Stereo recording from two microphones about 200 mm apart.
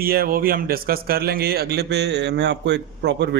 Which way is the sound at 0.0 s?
50° right (ahead or behind).